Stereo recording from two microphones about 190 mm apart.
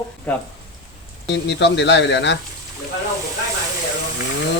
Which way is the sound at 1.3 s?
65° left (ahead or behind).